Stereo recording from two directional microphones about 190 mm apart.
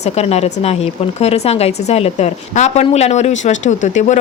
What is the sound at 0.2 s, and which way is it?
A woman's voice, 35° left (ahead or behind).